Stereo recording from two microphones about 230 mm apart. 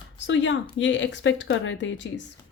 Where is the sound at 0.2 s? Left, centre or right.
Left.